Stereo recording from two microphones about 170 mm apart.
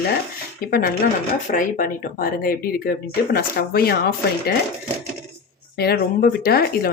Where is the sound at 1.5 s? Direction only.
55° left (ahead or behind).